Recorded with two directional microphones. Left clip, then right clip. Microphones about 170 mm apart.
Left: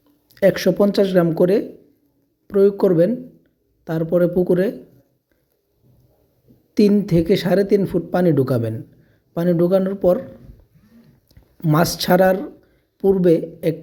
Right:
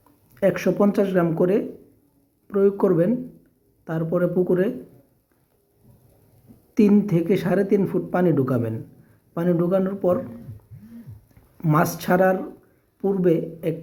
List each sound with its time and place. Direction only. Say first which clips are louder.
0.3 s speech: left 5 dB; 20° left (ahead or behind)
6.7 s speech: left 3 dB; 20° left (ahead or behind)
11.3 s speech: left 3 dB; 20° left (ahead or behind)